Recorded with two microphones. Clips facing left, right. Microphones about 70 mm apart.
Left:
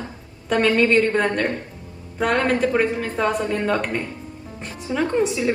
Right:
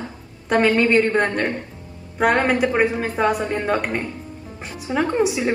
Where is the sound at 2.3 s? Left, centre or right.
Right.